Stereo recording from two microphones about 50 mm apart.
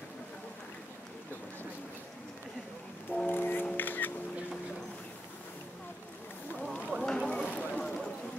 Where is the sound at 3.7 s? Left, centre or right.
Left.